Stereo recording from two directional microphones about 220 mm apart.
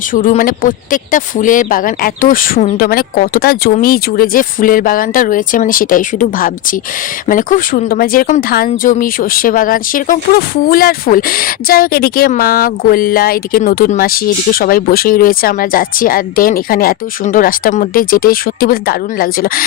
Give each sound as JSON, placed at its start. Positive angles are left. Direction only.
{"t": 0.1, "sound": "speech", "side_deg": 40}